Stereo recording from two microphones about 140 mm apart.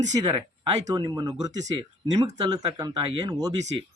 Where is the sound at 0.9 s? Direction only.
30° right (ahead or behind).